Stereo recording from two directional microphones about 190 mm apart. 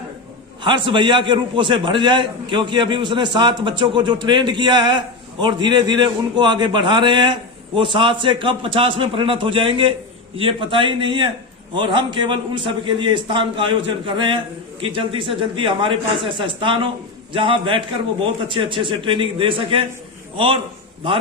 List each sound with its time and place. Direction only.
0.6 s a man's voice: 25° right (ahead or behind)